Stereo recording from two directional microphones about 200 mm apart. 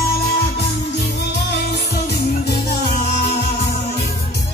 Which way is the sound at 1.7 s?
55° left (ahead or behind).